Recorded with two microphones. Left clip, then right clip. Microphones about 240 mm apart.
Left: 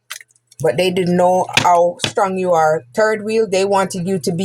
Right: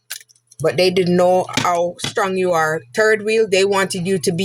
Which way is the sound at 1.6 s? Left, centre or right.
Right.